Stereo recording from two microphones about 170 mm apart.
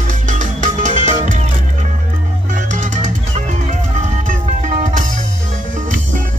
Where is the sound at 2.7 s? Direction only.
45° right (ahead or behind).